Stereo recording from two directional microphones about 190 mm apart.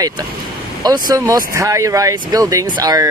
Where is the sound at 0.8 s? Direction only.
20° right (ahead or behind).